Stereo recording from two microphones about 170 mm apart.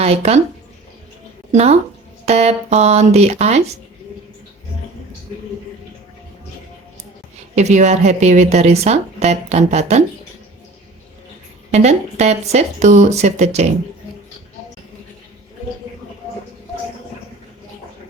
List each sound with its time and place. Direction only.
0.0 s speech: 40° right (ahead or behind)
1.5 s speech: 40° right (ahead or behind)
7.5 s speech: 40° right (ahead or behind)
11.7 s speech: 40° right (ahead or behind)